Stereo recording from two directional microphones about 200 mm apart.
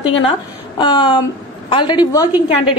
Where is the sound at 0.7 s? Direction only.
25° left (ahead or behind).